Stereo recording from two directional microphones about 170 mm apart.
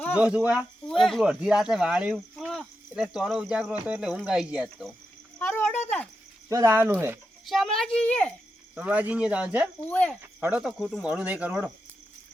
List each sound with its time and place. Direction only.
0.1 s speech: 5° right (ahead or behind)
5.4 s speech: 10° left (ahead or behind)
6.5 s speech: 15° right (ahead or behind)
7.4 s a child's voice: centre (ahead or behind)
8.7 s speech: 10° right (ahead or behind)
9.8 s a child's voice: 10° left (ahead or behind)
10.2 s speech: 10° right (ahead or behind)